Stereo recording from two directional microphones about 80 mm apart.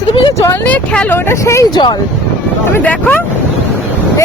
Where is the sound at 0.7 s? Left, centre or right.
Centre.